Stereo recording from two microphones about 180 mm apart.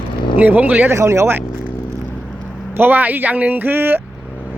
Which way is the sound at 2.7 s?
10° right (ahead or behind).